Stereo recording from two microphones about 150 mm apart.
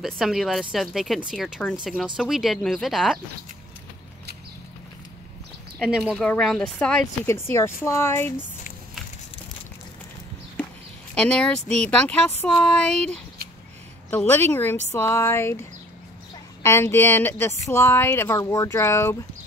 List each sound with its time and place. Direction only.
0.0 s speech: centre (ahead or behind)
5.8 s speech: 5° right (ahead or behind)
7.2 s speech: 15° left (ahead or behind)
11.1 s speech: 5° left (ahead or behind)
16.6 s speech: 15° left (ahead or behind)